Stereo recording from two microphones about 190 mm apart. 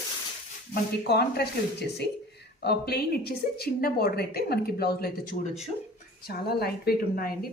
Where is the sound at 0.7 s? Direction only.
55° left (ahead or behind).